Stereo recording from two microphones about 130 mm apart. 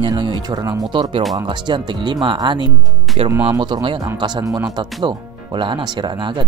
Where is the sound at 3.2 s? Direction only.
50° right (ahead or behind).